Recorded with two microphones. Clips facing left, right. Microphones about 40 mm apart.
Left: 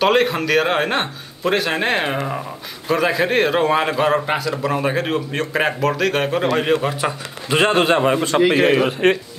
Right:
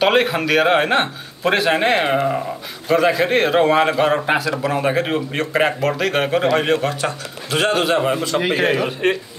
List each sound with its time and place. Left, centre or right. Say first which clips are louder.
0.0 s a man's voice: even; centre
6.8 s a man's voice: even; centre; by 9.1 s left